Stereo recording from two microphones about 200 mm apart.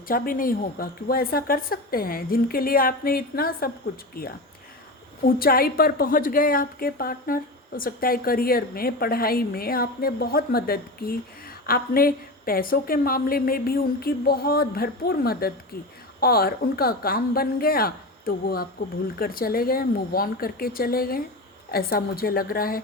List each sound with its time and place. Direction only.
0.1 s a woman's voice: 45° left (ahead or behind)